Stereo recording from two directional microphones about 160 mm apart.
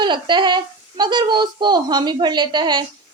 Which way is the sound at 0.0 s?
30° right (ahead or behind).